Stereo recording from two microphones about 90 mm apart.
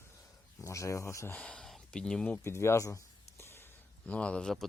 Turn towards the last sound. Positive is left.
turn(degrees=10)  # may be behind; listen again after turning